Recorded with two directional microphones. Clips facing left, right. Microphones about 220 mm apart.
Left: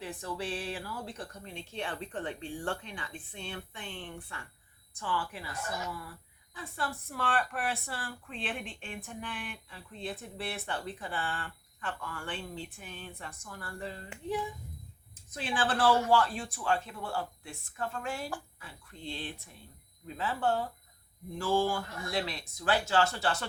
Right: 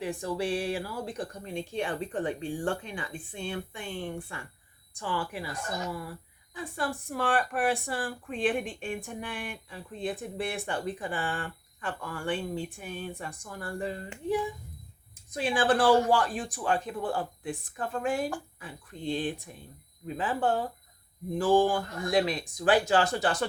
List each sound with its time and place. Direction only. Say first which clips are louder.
0.0 s speech: right 7 dB; 15° right (ahead or behind)
5.6 s speech: right 2 dB; 40° right (ahead or behind)
6.5 s a woman's voice: right 5 dB; 15° right (ahead or behind)
15.3 s speech: right 7 dB; 15° right (ahead or behind)